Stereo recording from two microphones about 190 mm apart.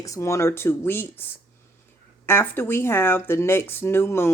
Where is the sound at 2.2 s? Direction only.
15° left (ahead or behind).